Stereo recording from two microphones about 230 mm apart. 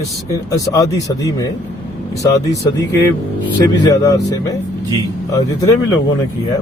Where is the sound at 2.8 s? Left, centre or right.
Centre.